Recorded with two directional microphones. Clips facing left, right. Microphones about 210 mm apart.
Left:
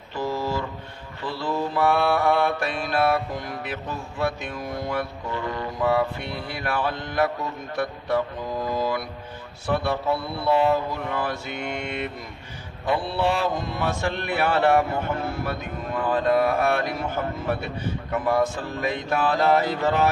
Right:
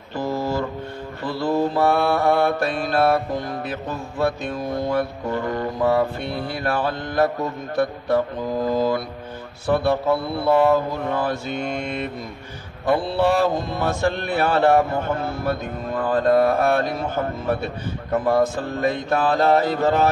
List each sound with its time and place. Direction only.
0.1 s a sound: 45° right (ahead or behind)
1.2 s mantra: 45° right (ahead or behind)
4.9 s mantra: 45° right (ahead or behind)
10.4 s mantra: 50° right (ahead or behind)
12.8 s mantra: 45° right (ahead or behind)
18.1 s mantra: 40° right (ahead or behind)